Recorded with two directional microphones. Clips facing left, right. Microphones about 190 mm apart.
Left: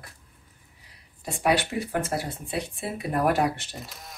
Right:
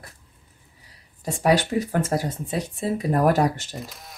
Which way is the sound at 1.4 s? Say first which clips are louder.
Right 4 dB; 40° right (ahead or behind).